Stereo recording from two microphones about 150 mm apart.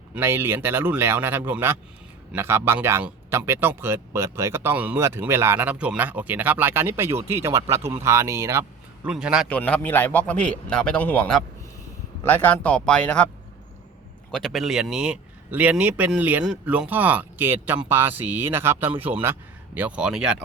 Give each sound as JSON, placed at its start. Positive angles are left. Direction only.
{"t": 0.1, "sound": "speech", "side_deg": -15}
{"t": 9.0, "sound": "a man's voice", "side_deg": -5}
{"t": 9.5, "sound": "speech", "side_deg": 10}
{"t": 14.3, "sound": "speech", "side_deg": 5}